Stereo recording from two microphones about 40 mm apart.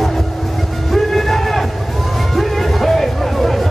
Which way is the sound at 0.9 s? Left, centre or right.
Centre.